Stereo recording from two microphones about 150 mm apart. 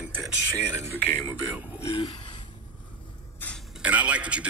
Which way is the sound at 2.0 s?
30° left (ahead or behind).